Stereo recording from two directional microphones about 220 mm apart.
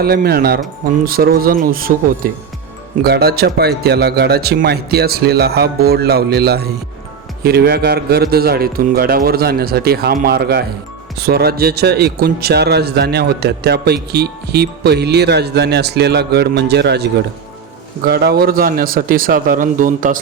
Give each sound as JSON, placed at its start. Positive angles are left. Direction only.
{"t": 0.0, "sound": "a man's voice", "side_deg": -45}